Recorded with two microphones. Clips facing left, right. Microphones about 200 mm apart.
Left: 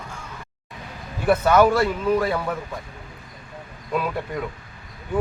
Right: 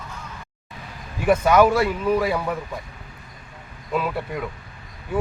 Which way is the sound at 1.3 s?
10° right (ahead or behind).